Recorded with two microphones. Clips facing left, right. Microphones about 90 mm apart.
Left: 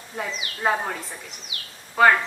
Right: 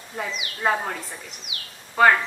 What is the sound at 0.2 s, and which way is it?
A woman's voice, 5° left (ahead or behind).